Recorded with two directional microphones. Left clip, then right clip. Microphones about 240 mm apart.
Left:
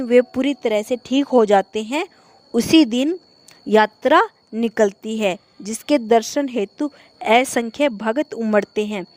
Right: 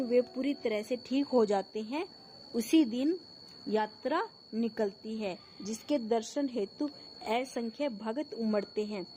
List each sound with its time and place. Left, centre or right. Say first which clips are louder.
0.1 s a woman's voice: left 15 dB; left